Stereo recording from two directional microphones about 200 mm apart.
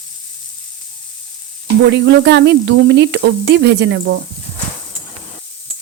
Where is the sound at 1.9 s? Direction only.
60° right (ahead or behind).